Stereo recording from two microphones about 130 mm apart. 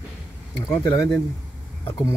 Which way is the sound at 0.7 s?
25° left (ahead or behind).